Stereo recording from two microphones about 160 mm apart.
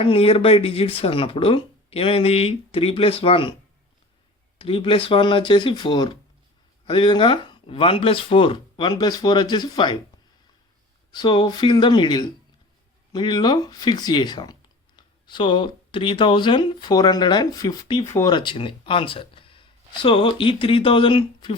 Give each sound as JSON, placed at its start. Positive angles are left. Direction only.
{"t": 0.0, "sound": "speech", "side_deg": 35}
{"t": 4.5, "sound": "speech", "side_deg": 35}
{"t": 11.1, "sound": "speech", "side_deg": 30}